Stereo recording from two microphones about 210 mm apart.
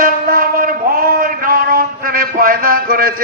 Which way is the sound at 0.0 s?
45° right (ahead or behind).